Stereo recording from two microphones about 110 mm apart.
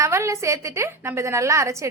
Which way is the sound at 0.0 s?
25° right (ahead or behind).